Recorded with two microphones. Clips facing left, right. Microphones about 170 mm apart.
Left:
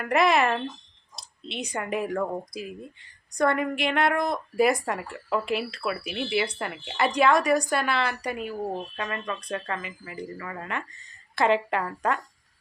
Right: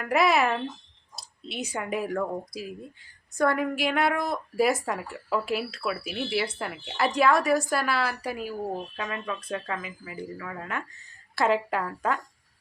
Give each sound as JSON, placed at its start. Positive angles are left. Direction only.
{"t": 0.0, "sound": "a woman's voice", "side_deg": -5}